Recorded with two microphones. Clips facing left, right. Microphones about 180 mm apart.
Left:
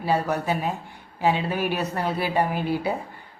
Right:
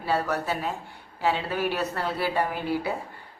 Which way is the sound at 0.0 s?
15° left (ahead or behind).